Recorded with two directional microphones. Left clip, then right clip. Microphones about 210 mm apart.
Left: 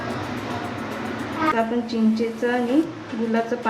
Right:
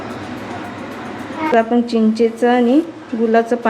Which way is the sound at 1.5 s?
55° right (ahead or behind).